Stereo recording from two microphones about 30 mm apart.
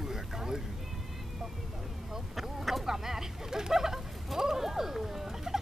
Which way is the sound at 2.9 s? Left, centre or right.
Centre.